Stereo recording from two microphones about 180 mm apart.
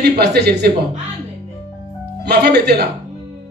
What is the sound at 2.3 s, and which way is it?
Speech, 65° right (ahead or behind).